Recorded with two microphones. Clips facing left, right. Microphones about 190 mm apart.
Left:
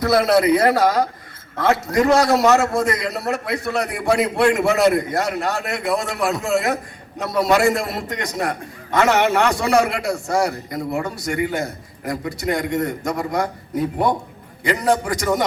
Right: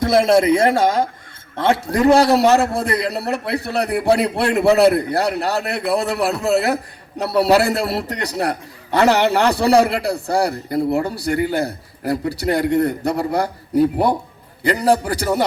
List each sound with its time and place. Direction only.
0.0 s a man's voice: 25° right (ahead or behind)